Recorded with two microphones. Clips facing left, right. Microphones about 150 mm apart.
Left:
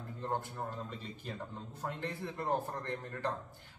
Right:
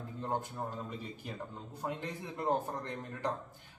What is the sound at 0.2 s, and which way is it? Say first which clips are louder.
A man's voice: right 1 dB; 15° right (ahead or behind).